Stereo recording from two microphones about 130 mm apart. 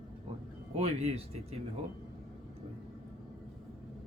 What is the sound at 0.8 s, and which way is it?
Speech, 55° right (ahead or behind).